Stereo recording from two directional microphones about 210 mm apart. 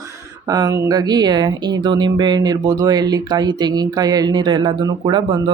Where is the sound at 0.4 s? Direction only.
20° right (ahead or behind).